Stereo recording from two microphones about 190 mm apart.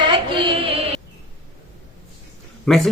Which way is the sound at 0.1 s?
25° right (ahead or behind).